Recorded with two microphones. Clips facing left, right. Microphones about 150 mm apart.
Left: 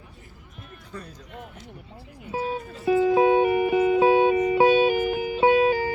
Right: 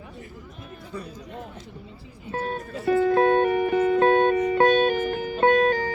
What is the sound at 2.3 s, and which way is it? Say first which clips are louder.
Music: even; 15° left (ahead or behind).